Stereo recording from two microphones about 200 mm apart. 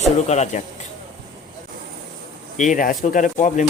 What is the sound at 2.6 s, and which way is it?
Speech, 40° left (ahead or behind).